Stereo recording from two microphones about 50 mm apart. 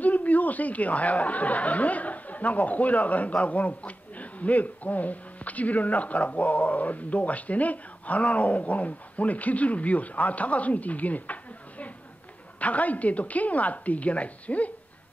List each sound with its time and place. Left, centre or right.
0.0 s speech: left
12.5 s a woman's voice: left